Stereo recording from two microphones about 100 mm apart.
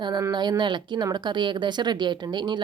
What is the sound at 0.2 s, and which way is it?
Speech, 45° right (ahead or behind).